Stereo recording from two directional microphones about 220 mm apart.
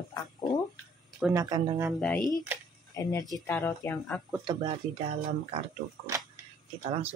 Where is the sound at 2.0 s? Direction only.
5° left (ahead or behind).